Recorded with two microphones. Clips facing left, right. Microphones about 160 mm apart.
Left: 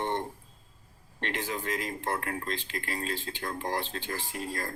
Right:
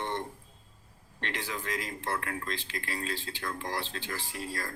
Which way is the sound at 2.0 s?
45° left (ahead or behind).